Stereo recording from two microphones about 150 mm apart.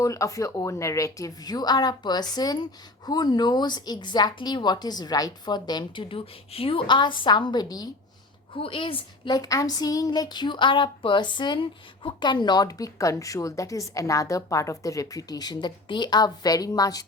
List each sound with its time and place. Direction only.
0.0 s speech: 20° left (ahead or behind)
8.5 s a woman's voice: 35° left (ahead or behind)